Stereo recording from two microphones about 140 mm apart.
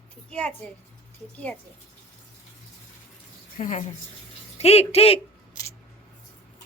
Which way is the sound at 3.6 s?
65° left (ahead or behind).